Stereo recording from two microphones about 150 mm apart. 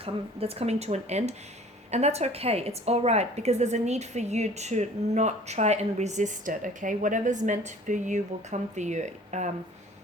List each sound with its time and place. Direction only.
0.0 s a woman's voice: 40° right (ahead or behind)